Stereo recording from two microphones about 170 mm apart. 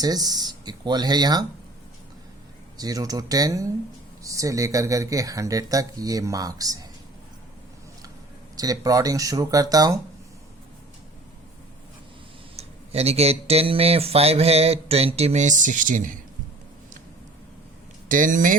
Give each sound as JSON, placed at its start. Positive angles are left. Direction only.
{"t": 0.0, "sound": "speech", "side_deg": -20}
{"t": 2.7, "sound": "speech", "side_deg": -20}
{"t": 8.5, "sound": "speech", "side_deg": -20}
{"t": 12.5, "sound": "speech", "side_deg": -35}
{"t": 18.1, "sound": "speech", "side_deg": -50}